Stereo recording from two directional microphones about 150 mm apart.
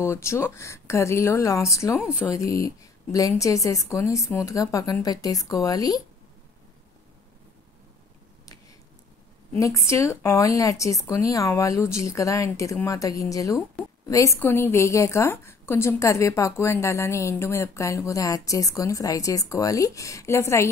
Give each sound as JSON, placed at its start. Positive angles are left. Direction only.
{"t": 0.0, "sound": "a woman's voice", "side_deg": 20}
{"t": 9.6, "sound": "a woman's voice", "side_deg": 20}